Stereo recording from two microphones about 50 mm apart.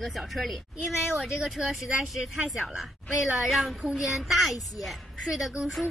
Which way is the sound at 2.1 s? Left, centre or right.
Centre.